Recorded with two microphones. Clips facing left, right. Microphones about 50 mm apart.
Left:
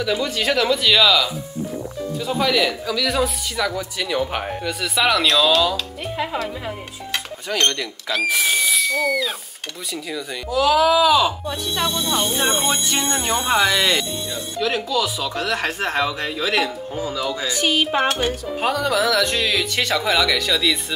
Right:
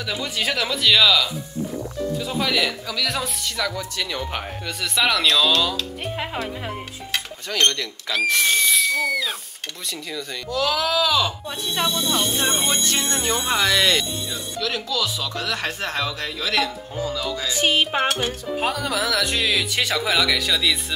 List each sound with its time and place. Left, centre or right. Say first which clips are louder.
0.0 s speech: left 4 dB; centre
6.1 s speech: left 5 dB; centre
7.4 s speech: even; centre
14.6 s speech: left 4 dB; centre
17.6 s cutlery: even; right
18.6 s speech: left 4 dB; centre